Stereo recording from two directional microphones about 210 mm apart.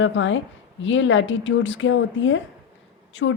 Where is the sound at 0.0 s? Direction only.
65° left (ahead or behind).